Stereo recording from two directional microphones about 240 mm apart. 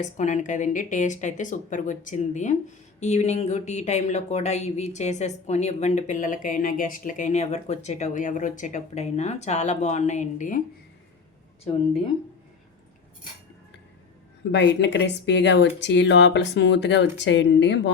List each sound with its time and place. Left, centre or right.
0.0 s a woman's voice: left
14.5 s speech: left